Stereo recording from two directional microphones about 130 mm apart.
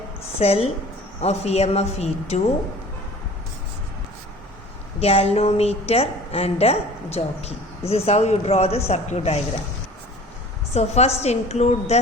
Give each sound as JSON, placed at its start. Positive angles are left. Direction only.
{"t": 0.3, "sound": "a woman's voice", "side_deg": 50}
{"t": 4.9, "sound": "a woman's voice", "side_deg": 50}
{"t": 10.8, "sound": "a woman's voice", "side_deg": 55}